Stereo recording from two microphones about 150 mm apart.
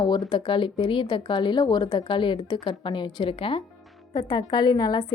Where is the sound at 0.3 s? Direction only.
35° left (ahead or behind).